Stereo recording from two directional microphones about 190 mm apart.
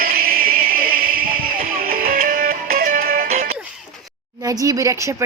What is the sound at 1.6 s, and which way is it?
Music, 50° right (ahead or behind).